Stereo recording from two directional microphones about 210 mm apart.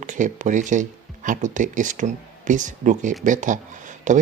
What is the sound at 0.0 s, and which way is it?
Speech, 35° right (ahead or behind).